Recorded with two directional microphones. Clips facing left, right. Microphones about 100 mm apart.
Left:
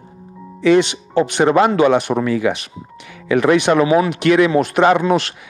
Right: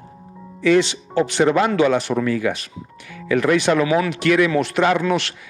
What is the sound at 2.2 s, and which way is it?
A man's voice, 15° left (ahead or behind).